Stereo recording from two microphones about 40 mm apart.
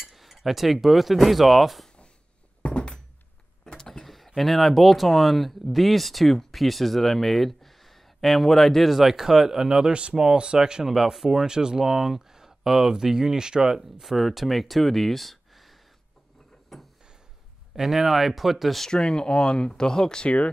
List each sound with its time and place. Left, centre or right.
0.0 s cutlery: centre
2.6 s thunk: left
3.6 s a sound: centre
4.0 s a sound: centre
4.4 s speech: centre
11.4 s speech: centre
16.7 s a sound: centre
17.7 s speech: centre
18.9 s speech: left
20.2 s speech: left